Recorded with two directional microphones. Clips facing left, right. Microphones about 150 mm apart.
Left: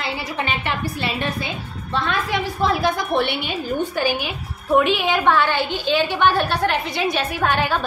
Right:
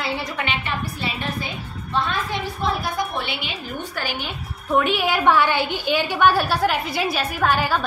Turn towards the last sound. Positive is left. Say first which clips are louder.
# even
turn(degrees=-5)  # may be behind; listen again after turning